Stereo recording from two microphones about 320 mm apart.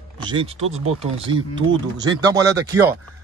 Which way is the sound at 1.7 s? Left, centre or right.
Centre.